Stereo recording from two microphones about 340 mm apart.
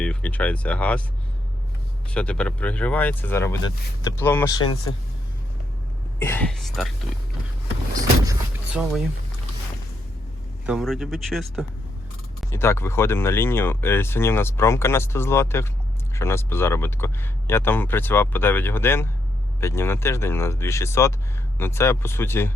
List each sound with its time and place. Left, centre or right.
0.0 s speech: centre
2.0 s speech: centre
4.6 s speech: left
6.1 s speech: centre
7.9 s vehicle: centre
10.7 s speech: centre